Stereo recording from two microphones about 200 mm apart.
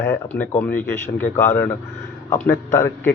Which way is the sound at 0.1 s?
10° left (ahead or behind).